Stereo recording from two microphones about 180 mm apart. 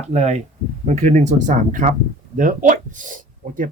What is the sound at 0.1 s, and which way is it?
Speech, 40° right (ahead or behind).